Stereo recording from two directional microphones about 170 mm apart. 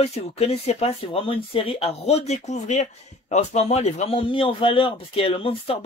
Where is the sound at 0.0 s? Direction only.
35° left (ahead or behind).